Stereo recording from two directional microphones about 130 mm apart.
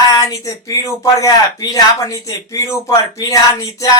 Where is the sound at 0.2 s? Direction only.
25° left (ahead or behind).